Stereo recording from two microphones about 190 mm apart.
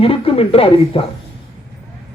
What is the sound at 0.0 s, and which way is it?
A man's voice, 30° left (ahead or behind).